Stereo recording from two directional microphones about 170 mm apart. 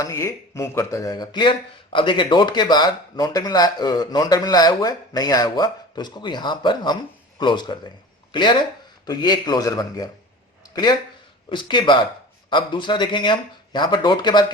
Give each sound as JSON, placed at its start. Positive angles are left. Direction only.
{"t": 0.0, "sound": "speech", "side_deg": 15}
{"t": 11.4, "sound": "speech", "side_deg": 25}